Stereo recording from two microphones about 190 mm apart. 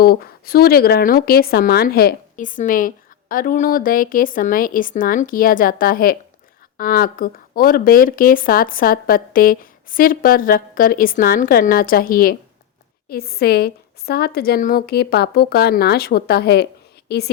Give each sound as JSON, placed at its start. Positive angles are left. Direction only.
{"t": 0.0, "sound": "a woman's voice", "side_deg": 55}